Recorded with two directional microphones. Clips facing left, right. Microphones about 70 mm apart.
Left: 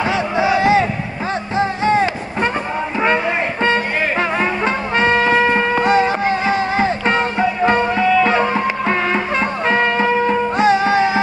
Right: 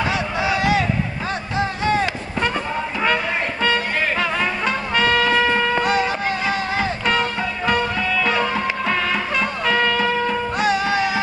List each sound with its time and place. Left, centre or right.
0.0 s a sound: left
1.6 s music: left
3.6 s music: left